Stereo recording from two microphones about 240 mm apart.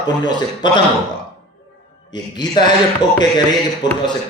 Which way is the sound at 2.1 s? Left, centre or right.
Centre.